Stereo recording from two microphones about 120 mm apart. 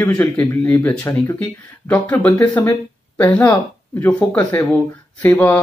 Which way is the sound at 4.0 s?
10° left (ahead or behind).